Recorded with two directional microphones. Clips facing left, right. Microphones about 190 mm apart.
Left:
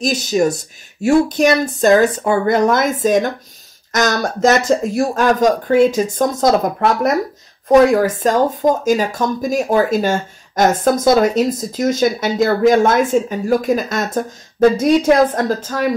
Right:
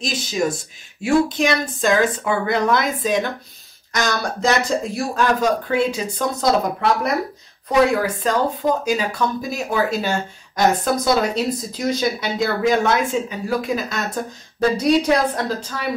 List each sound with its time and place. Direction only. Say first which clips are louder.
0.0 s speech: left 6 dB; 45° left (ahead or behind)